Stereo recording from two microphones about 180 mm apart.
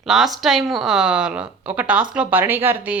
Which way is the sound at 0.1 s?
Centre (ahead or behind).